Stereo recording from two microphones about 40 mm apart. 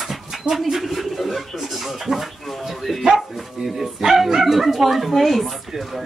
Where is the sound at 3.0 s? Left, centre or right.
Centre.